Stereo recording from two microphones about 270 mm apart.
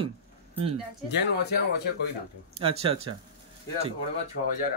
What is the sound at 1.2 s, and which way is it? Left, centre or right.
Speech, left.